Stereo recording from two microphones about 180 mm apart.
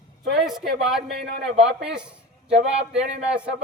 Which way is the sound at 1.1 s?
60° right (ahead or behind).